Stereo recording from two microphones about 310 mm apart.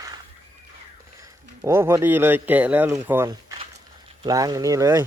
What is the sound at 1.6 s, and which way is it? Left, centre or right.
Speech, centre.